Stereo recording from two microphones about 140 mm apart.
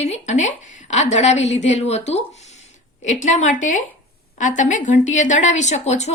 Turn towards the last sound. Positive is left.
turn(degrees=50)  # may be behind; listen again after turning